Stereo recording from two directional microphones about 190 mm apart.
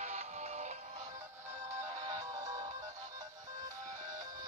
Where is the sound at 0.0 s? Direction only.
35° right (ahead or behind).